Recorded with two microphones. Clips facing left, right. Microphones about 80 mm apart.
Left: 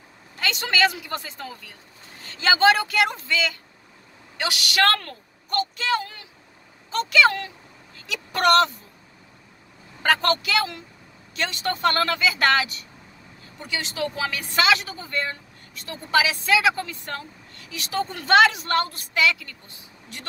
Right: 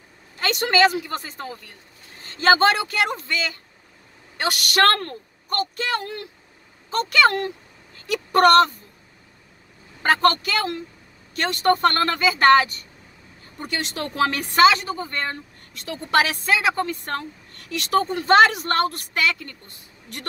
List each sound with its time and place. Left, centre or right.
1.0 s speech: right
4.4 s a woman's voice: right
10.0 s speech: right
13.6 s a woman's voice: right
14.6 s speech: right
15.9 s a woman's voice: right
16.4 s a woman's voice: right
18.1 s speech: right